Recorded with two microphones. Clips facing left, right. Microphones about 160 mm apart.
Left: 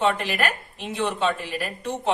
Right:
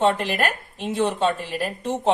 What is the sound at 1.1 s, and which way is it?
Speech, 40° right (ahead or behind).